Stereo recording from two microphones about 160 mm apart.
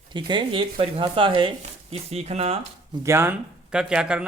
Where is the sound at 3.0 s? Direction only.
15° right (ahead or behind).